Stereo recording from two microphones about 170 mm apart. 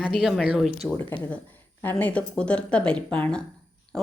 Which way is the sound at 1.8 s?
10° left (ahead or behind).